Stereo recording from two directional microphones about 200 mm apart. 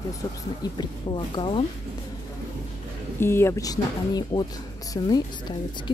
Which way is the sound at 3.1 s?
10° left (ahead or behind).